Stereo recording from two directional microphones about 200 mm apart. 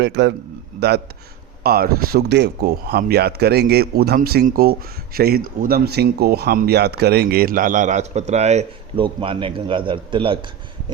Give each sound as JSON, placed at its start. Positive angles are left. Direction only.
{"t": 0.0, "sound": "a man's voice", "side_deg": -60}